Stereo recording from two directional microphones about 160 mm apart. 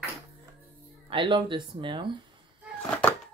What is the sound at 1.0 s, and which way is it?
Speech, 30° right (ahead or behind).